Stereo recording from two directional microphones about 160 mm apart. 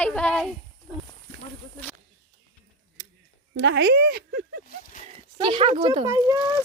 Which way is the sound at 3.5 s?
90° right.